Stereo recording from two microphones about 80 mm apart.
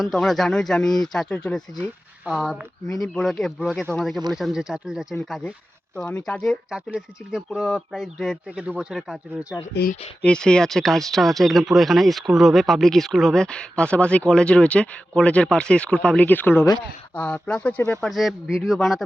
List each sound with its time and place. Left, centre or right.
0.0 s speech: centre
6.1 s speech: centre
6.7 s speech: centre
10.2 s speech: centre
18.0 s speech: centre